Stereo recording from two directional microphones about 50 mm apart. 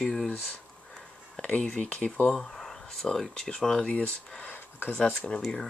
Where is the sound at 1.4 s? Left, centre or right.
Centre.